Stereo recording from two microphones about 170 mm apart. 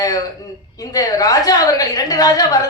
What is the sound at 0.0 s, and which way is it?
A woman's voice, 20° left (ahead or behind).